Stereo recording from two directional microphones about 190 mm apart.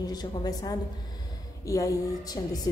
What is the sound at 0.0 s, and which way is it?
A woman's voice, 20° left (ahead or behind).